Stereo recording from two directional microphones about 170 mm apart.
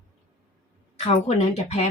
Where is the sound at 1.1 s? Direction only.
40° left (ahead or behind).